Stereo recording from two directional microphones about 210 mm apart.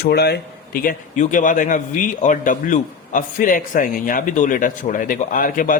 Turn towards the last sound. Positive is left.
turn(degrees=40)  # may be behind; listen again after turning